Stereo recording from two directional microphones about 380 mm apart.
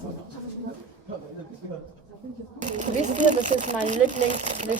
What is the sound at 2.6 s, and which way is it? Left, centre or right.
Speech, centre.